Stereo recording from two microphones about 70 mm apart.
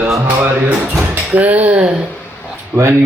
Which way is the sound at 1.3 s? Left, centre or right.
Right.